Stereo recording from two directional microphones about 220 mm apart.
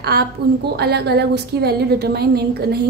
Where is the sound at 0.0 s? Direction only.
45° right (ahead or behind).